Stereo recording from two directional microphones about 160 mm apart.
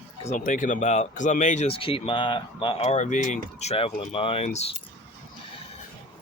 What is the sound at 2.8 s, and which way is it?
Speech, 45° left (ahead or behind).